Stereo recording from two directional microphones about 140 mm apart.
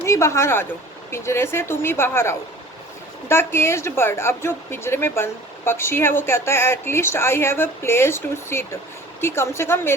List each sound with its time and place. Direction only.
0.0 s speech: 20° left (ahead or behind)